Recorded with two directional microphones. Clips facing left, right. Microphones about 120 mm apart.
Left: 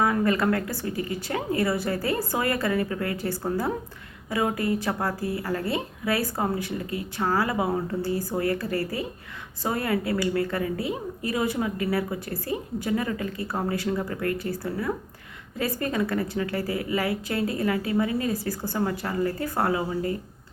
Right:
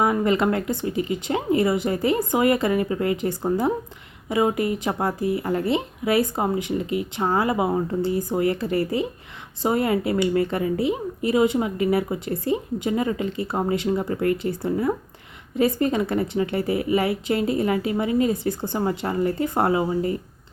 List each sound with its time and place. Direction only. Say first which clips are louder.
0.0 s speech: right 3 dB; 20° right (ahead or behind)